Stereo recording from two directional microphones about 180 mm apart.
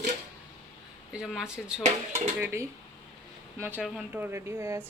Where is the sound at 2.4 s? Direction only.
15° right (ahead or behind).